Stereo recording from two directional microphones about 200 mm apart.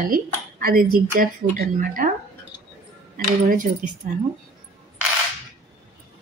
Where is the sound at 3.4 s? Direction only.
40° right (ahead or behind).